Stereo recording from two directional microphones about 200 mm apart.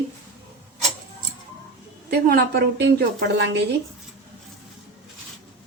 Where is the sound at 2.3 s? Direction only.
55° right (ahead or behind).